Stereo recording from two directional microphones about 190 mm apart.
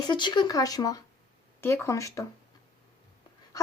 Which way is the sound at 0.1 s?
25° left (ahead or behind).